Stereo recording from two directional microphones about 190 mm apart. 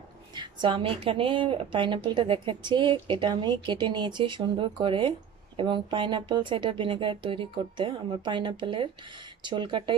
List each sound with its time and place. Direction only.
0.3 s a woman's voice: 25° right (ahead or behind)